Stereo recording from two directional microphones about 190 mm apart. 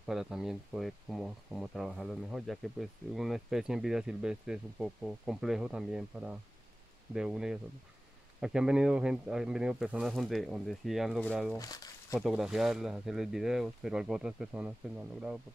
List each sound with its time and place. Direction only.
0.0 s speech: centre (ahead or behind)
11.5 s speech: 20° left (ahead or behind)
12.2 s speech: centre (ahead or behind)